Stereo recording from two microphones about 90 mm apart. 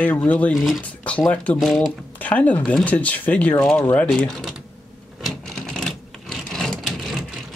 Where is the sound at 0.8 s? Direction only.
15° left (ahead or behind).